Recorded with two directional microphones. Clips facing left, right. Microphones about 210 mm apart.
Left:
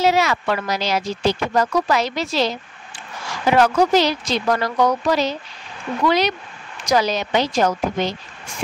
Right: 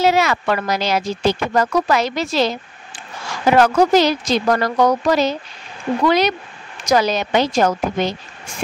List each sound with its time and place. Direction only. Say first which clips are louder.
0.0 s speech: right 2 dB; 55° right (ahead or behind)